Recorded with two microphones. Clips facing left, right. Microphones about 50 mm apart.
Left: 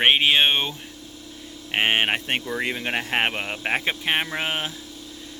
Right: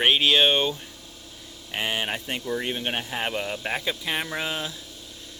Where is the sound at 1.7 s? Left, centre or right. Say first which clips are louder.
Left 6 dB; left.